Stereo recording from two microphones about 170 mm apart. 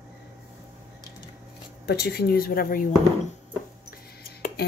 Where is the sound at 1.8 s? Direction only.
70° left (ahead or behind).